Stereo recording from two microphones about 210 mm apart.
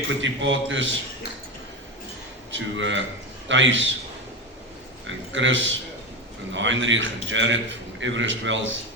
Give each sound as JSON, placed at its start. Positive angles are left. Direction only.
{"t": 0.2, "sound": "a man's voice", "side_deg": -60}
{"t": 2.5, "sound": "a man's voice", "side_deg": -65}
{"t": 5.0, "sound": "a man's voice", "side_deg": -60}